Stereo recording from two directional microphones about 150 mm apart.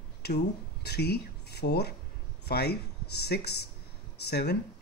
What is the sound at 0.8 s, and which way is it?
Speech, 90° left.